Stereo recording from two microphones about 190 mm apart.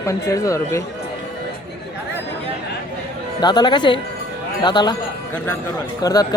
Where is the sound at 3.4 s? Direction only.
20° left (ahead or behind).